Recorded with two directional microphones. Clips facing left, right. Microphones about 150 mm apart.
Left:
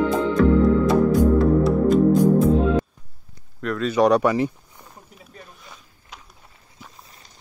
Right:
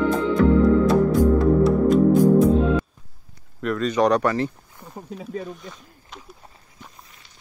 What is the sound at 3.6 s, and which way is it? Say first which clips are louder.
Speech: left 1 dB; centre (ahead or behind).